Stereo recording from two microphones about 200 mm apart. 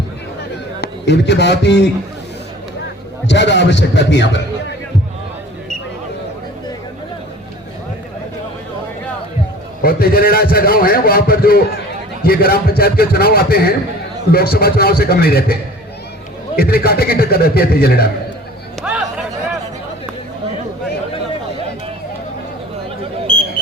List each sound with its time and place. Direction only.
0.8 s a man's voice: 60° left (ahead or behind)
3.2 s a man's voice: 60° left (ahead or behind)
9.8 s a man's voice: 50° left (ahead or behind)
16.6 s a man's voice: 50° left (ahead or behind)
18.9 s a sound: 5° right (ahead or behind)